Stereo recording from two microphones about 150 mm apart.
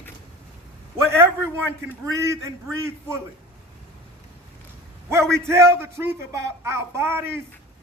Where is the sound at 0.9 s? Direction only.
15° right (ahead or behind).